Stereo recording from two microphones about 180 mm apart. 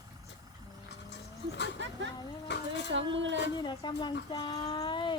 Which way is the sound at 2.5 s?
75° left (ahead or behind).